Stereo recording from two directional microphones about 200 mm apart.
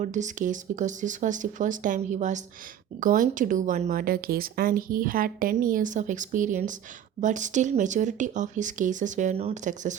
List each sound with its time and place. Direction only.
0.0 s speech: 40° right (ahead or behind)